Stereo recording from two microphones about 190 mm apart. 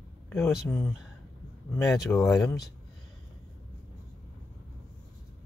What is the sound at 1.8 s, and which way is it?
Speech, 15° left (ahead or behind).